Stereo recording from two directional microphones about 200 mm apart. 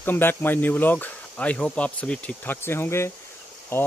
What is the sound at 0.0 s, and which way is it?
Speech, 10° left (ahead or behind).